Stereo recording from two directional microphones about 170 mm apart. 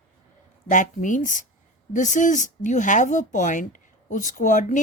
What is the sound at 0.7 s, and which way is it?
A woman's voice, 50° left (ahead or behind).